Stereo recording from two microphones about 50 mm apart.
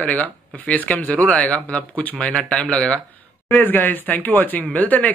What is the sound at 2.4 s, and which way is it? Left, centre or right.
Speech, centre.